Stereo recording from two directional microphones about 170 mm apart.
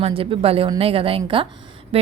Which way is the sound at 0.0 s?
35° right (ahead or behind).